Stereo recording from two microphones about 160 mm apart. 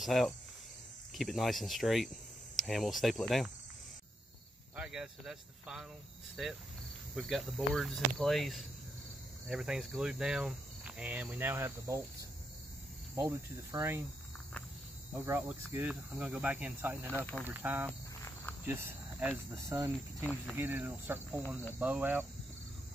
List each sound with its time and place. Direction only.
0.0 s speech: centre (ahead or behind)
4.7 s speech: 5° right (ahead or behind)
13.1 s speech: 20° right (ahead or behind)
15.1 s speech: 10° right (ahead or behind)